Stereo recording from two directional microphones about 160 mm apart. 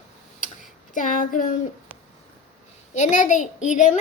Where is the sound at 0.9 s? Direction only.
55° left (ahead or behind).